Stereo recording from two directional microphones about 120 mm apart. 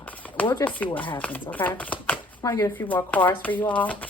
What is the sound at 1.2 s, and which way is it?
Speech, 15° left (ahead or behind).